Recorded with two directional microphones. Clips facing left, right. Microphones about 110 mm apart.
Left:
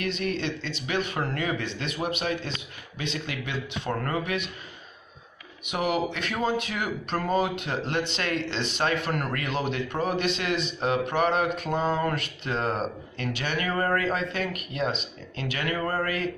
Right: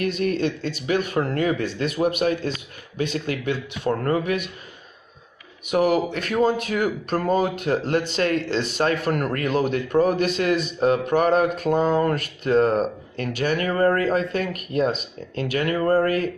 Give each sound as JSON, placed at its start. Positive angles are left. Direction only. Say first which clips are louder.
{"t": 0.0, "sound": "speech", "louder": "right 6 dB", "side_deg": -45}
{"t": 5.7, "sound": "speech", "louder": "right 7 dB", "side_deg": -40}